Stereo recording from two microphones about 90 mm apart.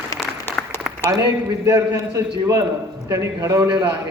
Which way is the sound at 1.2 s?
50° right (ahead or behind).